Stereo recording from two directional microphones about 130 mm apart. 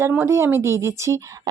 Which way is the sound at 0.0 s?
20° right (ahead or behind).